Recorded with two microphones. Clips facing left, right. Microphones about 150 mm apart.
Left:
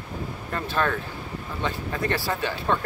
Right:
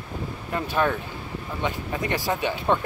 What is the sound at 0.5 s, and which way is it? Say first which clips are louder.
Speech: right 2 dB; 15° right (ahead or behind).